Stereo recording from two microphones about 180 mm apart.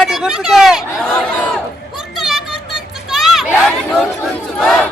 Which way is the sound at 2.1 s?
Centre (ahead or behind).